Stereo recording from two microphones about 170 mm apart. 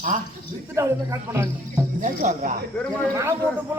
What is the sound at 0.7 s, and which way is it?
A man's voice, 15° right (ahead or behind).